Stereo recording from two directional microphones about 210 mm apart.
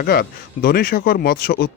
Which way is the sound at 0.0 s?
45° left (ahead or behind).